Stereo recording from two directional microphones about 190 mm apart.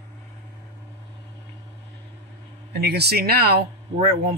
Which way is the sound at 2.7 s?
60° right (ahead or behind).